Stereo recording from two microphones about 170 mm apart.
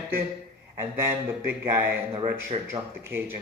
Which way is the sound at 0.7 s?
15° right (ahead or behind).